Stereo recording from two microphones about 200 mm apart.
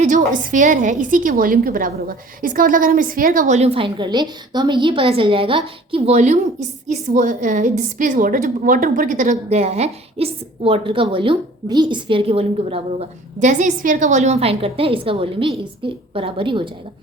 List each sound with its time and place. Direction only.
0.0 s a woman's voice: 40° right (ahead or behind); by 16.6 s 25° right (ahead or behind)